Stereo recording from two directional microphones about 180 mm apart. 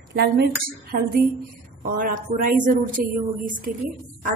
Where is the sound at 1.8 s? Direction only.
45° right (ahead or behind).